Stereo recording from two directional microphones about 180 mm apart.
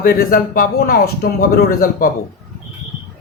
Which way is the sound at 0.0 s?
55° left (ahead or behind).